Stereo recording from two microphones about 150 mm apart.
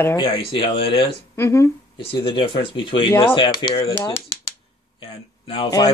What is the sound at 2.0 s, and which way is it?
Speech, 40° left (ahead or behind).